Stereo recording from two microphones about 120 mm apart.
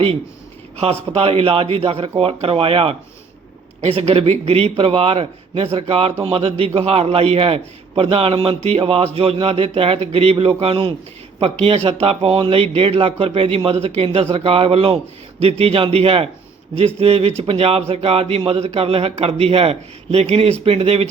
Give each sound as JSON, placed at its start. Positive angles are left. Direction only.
{"t": 1.1, "sound": "a man's voice", "side_deg": -55}